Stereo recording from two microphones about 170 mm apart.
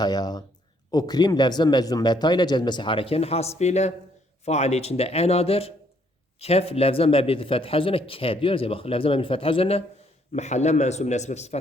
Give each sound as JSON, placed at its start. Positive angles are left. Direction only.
{"t": 0.0, "sound": "a man's voice", "side_deg": 25}